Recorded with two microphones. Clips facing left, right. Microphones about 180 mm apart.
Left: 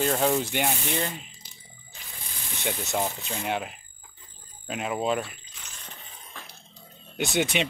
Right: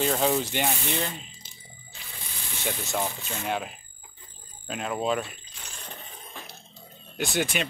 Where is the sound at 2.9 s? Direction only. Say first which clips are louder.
Left 2 dB; 15° left (ahead or behind).